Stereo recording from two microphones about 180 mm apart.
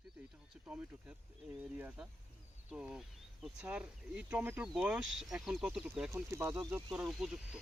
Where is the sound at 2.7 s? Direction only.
5° right (ahead or behind).